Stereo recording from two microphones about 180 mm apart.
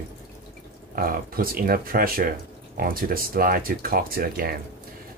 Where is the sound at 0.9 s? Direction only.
55° right (ahead or behind).